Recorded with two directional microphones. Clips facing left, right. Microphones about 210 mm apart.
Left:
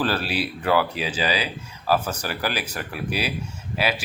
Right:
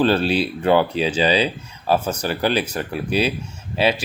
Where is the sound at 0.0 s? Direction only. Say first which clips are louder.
Right 7 dB; 25° right (ahead or behind).